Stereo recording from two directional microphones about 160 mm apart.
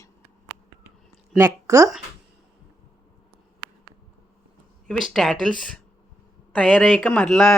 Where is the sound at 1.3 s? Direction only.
20° right (ahead or behind).